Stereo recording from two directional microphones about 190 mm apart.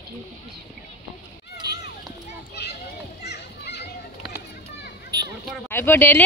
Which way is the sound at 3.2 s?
60° left (ahead or behind).